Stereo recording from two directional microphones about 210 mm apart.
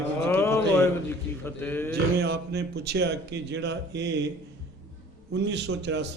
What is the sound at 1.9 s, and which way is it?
A man's voice, 50° right (ahead or behind).